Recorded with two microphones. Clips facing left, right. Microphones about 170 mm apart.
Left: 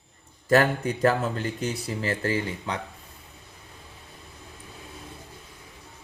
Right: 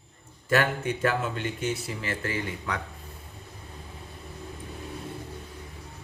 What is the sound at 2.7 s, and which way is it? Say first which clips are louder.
Speech: left 1 dB; 25° left (ahead or behind).